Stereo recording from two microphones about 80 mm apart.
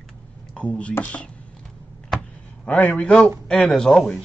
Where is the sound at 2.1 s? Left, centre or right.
Centre.